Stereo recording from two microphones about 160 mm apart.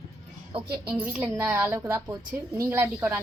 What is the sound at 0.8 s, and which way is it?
Speech, 5° right (ahead or behind).